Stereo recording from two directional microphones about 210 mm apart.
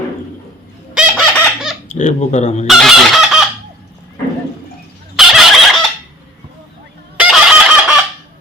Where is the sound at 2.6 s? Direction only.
Centre (ahead or behind).